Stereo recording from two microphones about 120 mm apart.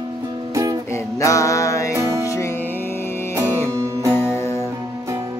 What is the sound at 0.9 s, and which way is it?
Music, 25° left (ahead or behind).